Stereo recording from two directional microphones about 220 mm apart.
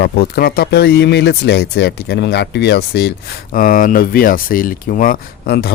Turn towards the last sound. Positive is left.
turn(degrees=45)  # may be behind; listen again after turning